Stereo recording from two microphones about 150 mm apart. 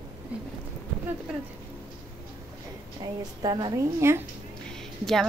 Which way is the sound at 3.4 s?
25° right (ahead or behind).